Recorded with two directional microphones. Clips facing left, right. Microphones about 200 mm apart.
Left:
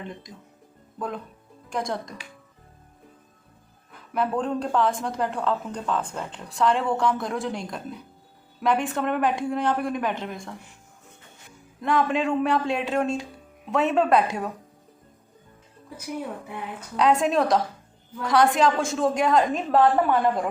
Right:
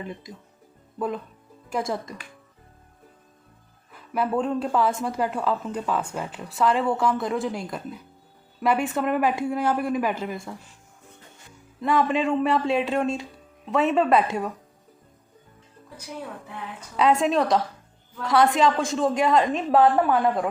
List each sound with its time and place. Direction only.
0.9 s speech: 5° right (ahead or behind)
3.9 s speech: 5° right (ahead or behind)
11.8 s speech: centre (ahead or behind)
17.0 s speech: centre (ahead or behind)